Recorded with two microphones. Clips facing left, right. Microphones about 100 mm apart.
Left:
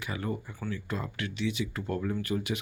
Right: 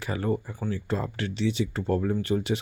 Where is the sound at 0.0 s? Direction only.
35° right (ahead or behind).